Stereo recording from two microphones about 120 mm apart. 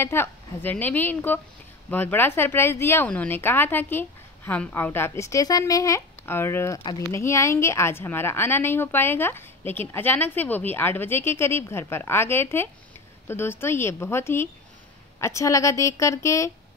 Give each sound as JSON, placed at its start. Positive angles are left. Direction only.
{"t": 0.0, "sound": "a woman's voice", "side_deg": 20}